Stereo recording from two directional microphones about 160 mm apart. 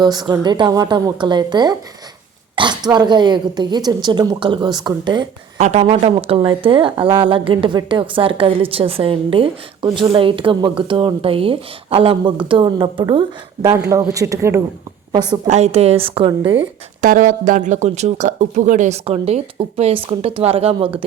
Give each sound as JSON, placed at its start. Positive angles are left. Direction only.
{"t": 0.0, "sound": "a woman's voice", "side_deg": -25}
{"t": 5.5, "sound": "a woman's voice", "side_deg": -45}
{"t": 15.4, "sound": "speech", "side_deg": -45}
{"t": 17.0, "sound": "speech", "side_deg": -55}